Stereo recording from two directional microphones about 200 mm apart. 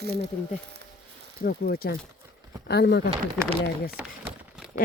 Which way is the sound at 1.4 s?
50° left (ahead or behind).